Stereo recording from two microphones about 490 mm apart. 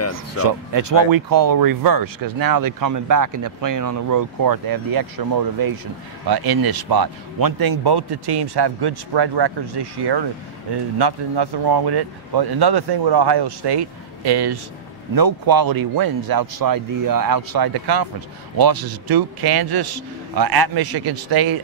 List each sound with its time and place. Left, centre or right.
0.7 s speech: right